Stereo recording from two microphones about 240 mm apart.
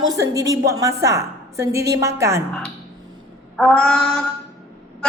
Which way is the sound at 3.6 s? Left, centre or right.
Centre.